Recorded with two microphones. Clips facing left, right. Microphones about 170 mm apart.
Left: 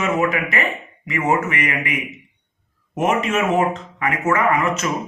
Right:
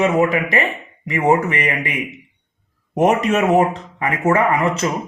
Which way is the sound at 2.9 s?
35° right (ahead or behind).